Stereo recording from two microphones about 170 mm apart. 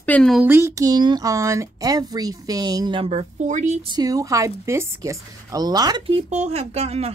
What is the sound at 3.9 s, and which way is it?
Speech, 20° right (ahead or behind).